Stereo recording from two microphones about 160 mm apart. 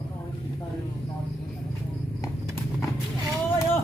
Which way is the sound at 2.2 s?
15° left (ahead or behind).